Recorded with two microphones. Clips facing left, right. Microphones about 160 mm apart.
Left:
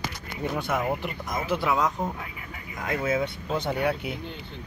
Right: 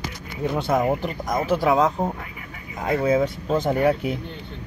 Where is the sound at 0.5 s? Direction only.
35° right (ahead or behind).